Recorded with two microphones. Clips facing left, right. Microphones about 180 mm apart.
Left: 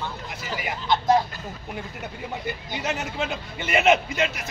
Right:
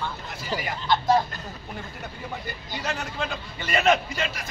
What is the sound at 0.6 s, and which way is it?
Vehicle, 20° left (ahead or behind).